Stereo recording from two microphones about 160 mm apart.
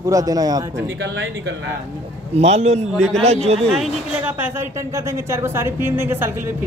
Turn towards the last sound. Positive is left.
turn(degrees=-15)  # may be behind; listen again after turning